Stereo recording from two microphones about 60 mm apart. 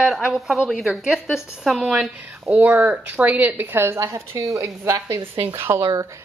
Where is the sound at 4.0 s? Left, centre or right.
Right.